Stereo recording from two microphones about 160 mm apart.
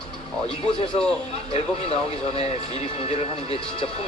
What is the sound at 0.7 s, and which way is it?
Speech, 35° left (ahead or behind).